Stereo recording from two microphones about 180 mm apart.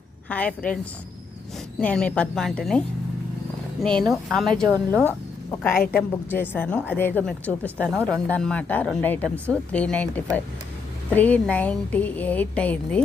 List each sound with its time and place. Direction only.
0.3 s speech: 5° left (ahead or behind)
1.8 s a woman's voice: 5° left (ahead or behind)